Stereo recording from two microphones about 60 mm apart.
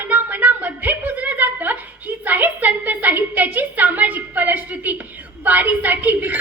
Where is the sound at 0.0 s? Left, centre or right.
Right.